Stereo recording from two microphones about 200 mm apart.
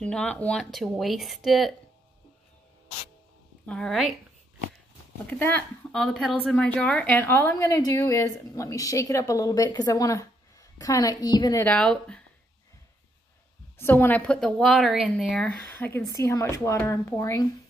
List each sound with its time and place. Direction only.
0.0 s speech: 5° left (ahead or behind)
3.6 s speech: 5° left (ahead or behind)
5.2 s speech: 10° left (ahead or behind)
11.6 s speech: 5° left (ahead or behind)
13.7 s speech: 10° left (ahead or behind)